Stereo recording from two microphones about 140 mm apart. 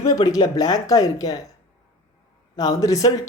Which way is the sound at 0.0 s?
25° left (ahead or behind).